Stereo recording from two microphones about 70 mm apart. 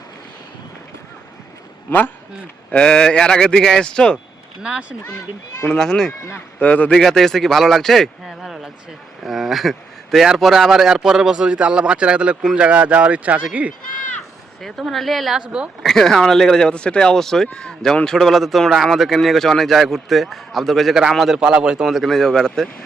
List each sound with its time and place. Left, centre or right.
1.9 s a man's voice: left
2.7 s speech: centre
4.6 s speech: centre
5.6 s speech: centre
6.6 s a man's voice: left
7.0 s speech: centre
14.6 s speech: centre
15.4 s speech: centre
15.8 s speech: centre
21.3 s speech: centre
21.8 s speech: centre